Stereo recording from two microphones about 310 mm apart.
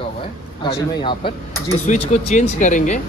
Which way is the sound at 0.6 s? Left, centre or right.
Centre.